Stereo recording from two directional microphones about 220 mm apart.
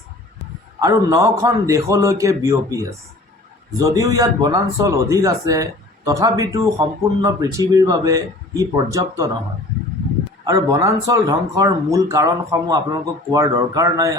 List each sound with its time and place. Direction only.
0.8 s a man's voice: 15° right (ahead or behind)
10.4 s a man's voice: 15° right (ahead or behind)